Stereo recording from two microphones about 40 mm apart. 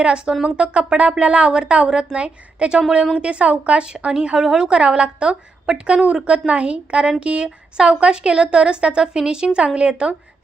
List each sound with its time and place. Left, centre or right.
0.0 s a woman's voice: right
4.1 s a woman's voice: right
4.4 s a woman's voice: centre
4.7 s a woman's voice: right